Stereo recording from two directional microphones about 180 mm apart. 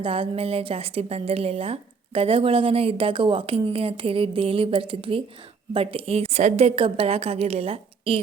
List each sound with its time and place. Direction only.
0.0 s speech: 30° right (ahead or behind)